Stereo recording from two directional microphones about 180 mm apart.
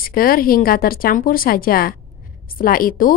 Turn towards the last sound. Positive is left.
turn(degrees=50)  # may be behind; listen again after turning